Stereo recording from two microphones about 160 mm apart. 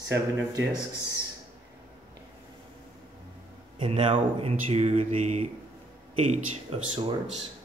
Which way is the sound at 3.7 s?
35° right (ahead or behind).